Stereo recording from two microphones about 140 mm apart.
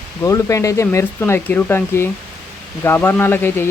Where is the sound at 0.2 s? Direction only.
20° left (ahead or behind).